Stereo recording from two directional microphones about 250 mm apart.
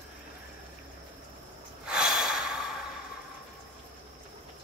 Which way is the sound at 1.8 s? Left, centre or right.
Centre.